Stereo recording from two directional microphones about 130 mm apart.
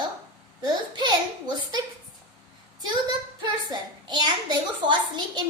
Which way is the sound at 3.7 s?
30° right (ahead or behind).